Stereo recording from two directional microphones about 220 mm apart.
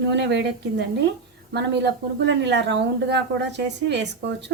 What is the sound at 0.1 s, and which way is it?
A woman's voice, 50° right (ahead or behind).